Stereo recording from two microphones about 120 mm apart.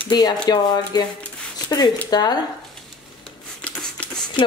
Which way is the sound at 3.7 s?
10° left (ahead or behind).